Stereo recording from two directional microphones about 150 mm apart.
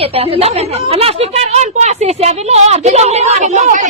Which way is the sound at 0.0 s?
40° right (ahead or behind).